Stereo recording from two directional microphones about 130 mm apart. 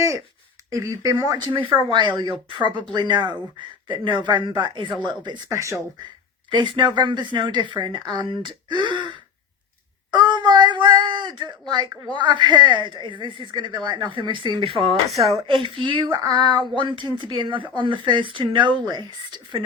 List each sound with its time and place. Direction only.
0.7 s speech: 25° right (ahead or behind)
1.1 s speech: 35° right (ahead or behind)
5.5 s speech: 20° right (ahead or behind)
6.5 s speech: 35° right (ahead or behind)
10.1 s a sound: 35° right (ahead or behind)
12.1 s speech: 35° right (ahead or behind)